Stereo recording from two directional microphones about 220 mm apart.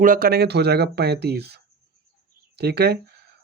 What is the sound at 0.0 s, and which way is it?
Speech, 40° right (ahead or behind).